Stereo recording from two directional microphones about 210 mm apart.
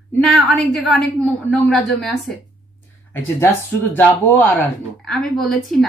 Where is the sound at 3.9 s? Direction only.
10° left (ahead or behind).